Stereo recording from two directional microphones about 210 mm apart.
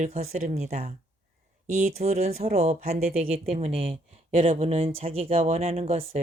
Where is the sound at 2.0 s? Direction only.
30° right (ahead or behind).